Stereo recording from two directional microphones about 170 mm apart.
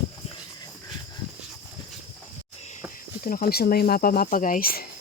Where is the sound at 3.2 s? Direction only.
55° left (ahead or behind).